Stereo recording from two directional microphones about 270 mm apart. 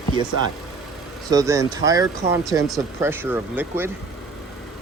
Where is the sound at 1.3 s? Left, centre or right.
Centre.